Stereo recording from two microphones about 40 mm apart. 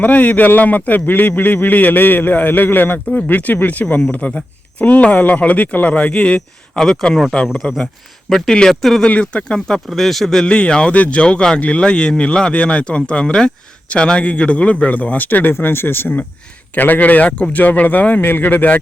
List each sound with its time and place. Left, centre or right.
0.0 s a man's voice: left
4.4 s speech: left
6.7 s speech: centre
7.6 s speech: left
8.3 s speech: centre
9.2 s speech: left
9.6 s speech: centre
10.4 s speech: left
15.5 s a man's voice: left
16.7 s speech: left
18.2 s a man's voice: left